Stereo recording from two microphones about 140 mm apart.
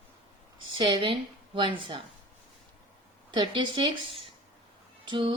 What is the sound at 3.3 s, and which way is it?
A woman's voice, 35° right (ahead or behind).